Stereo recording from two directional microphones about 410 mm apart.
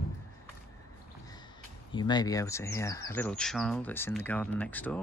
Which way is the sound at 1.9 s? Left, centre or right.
Centre.